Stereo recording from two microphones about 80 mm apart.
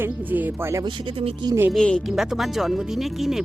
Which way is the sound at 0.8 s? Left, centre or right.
Right.